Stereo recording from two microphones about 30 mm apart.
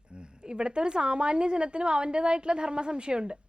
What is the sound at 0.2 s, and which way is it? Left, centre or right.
A woman's voice, right.